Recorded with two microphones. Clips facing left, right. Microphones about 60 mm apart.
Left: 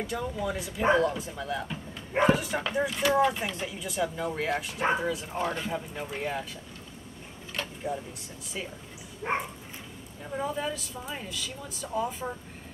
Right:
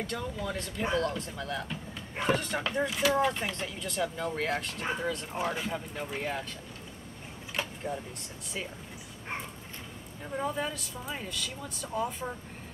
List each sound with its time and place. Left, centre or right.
0.0 s speech: centre
7.6 s a sound: centre
9.3 s dog: left
10.3 s speech: centre